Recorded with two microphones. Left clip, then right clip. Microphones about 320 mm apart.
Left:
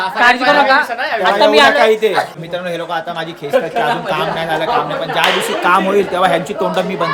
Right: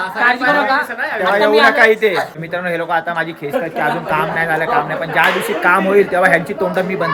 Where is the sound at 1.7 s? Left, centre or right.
Centre.